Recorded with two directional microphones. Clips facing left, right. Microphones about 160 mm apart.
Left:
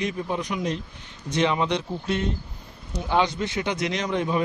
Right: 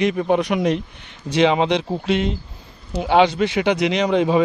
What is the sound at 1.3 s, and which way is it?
Speech, 90° right.